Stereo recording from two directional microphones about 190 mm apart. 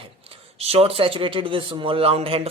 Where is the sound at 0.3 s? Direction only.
30° right (ahead or behind).